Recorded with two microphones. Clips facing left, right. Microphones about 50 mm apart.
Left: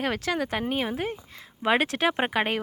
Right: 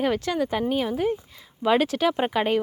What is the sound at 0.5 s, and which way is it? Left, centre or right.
A woman's voice, left.